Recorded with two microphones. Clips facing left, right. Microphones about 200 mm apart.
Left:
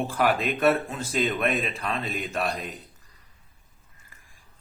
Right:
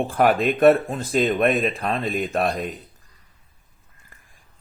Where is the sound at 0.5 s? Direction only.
40° right (ahead or behind).